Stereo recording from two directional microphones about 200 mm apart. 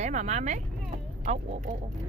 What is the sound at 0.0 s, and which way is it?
Speech, 35° right (ahead or behind).